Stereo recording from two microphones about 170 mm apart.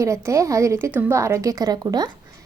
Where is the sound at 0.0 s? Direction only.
15° right (ahead or behind).